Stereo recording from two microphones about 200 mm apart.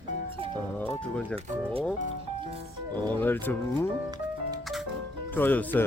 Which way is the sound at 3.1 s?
10° left (ahead or behind).